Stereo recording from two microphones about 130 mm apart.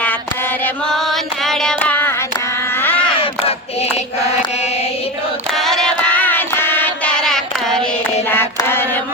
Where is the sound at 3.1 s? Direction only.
50° left (ahead or behind).